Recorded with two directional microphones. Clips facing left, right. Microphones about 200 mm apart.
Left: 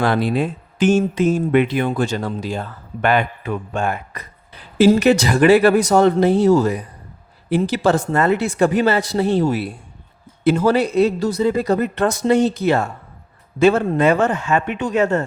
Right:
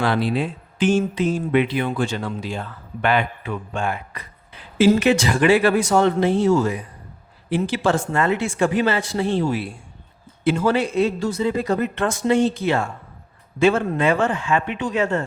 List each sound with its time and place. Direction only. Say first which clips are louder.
0.0 s speech: left 3 dB; 45° left (ahead or behind)